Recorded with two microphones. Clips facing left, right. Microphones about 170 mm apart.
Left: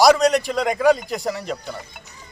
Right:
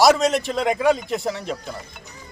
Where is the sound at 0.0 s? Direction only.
Centre (ahead or behind).